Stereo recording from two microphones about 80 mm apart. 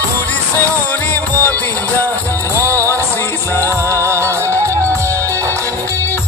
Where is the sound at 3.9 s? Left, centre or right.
Right.